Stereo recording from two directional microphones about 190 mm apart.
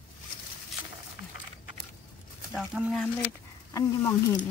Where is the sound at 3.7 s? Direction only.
15° left (ahead or behind).